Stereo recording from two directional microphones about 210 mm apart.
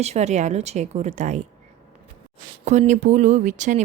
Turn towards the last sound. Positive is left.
turn(degrees=-35)  # may be behind; listen again after turning